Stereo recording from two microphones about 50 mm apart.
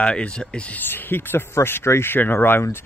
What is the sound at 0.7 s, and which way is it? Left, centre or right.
Speech, left.